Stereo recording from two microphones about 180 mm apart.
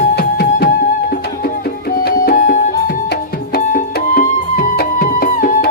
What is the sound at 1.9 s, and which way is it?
Music, 50° left (ahead or behind).